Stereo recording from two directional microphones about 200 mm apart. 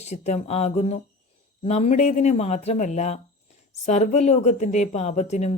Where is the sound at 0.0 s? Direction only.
35° left (ahead or behind).